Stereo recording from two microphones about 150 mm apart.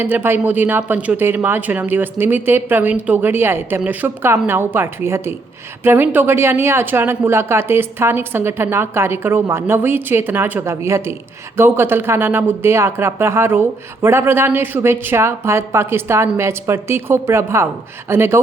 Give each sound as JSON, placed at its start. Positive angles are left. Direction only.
{"t": 0.0, "sound": "speech", "side_deg": -15}